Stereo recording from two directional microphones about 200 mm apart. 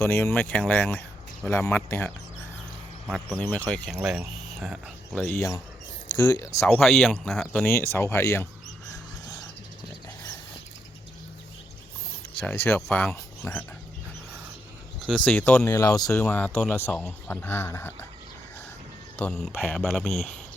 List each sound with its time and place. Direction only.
0.0 s speech: 10° left (ahead or behind)
3.3 s speech: 10° left (ahead or behind)
3.7 s speech: centre (ahead or behind); by 6.7 s 15° left (ahead or behind)
6.7 s speech: centre (ahead or behind)
12.4 s speech: 10° left (ahead or behind)
15.0 s speech: 5° left (ahead or behind)
15.7 s speech: 15° left (ahead or behind)
16.1 s speech: 5° left (ahead or behind)
19.3 s speech: 5° left (ahead or behind)